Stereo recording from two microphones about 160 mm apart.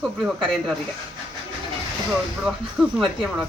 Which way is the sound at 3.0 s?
Centre (ahead or behind).